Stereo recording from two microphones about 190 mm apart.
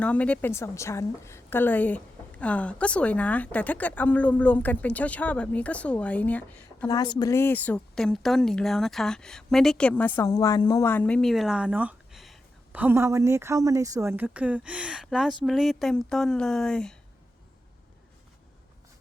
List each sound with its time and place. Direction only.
0.0 s a woman's voice: 5° left (ahead or behind)
6.8 s a woman's voice: 20° left (ahead or behind); by 16.9 s 5° left (ahead or behind)